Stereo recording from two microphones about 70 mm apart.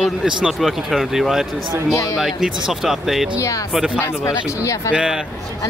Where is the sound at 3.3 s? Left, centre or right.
Left.